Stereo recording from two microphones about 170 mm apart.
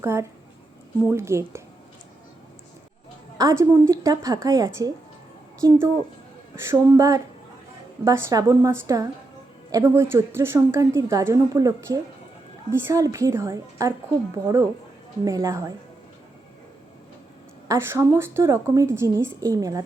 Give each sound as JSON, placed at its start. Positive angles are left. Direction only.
{"t": 0.0, "sound": "a woman's voice", "side_deg": -15}
{"t": 3.3, "sound": "a woman's voice", "side_deg": -20}
{"t": 17.7, "sound": "a woman's voice", "side_deg": -15}